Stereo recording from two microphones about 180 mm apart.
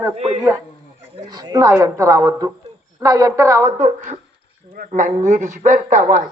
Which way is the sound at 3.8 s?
40° right (ahead or behind).